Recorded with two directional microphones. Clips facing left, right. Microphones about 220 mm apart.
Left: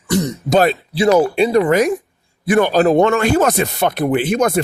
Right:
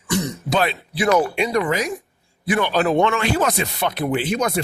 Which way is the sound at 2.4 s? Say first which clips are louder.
Left 6 dB; 45° left (ahead or behind).